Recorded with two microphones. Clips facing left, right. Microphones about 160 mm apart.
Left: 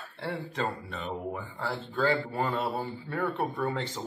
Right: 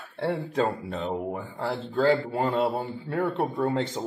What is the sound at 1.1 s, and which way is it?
Speech, 25° right (ahead or behind).